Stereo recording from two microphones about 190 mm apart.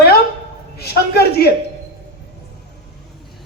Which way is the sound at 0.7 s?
55° left (ahead or behind).